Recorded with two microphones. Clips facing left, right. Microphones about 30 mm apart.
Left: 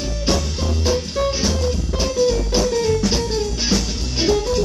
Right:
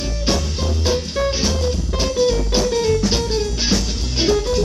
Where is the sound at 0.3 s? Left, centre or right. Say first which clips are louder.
Even; centre.